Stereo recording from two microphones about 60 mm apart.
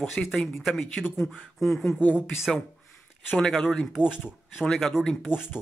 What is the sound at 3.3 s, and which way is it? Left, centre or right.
Speech, centre.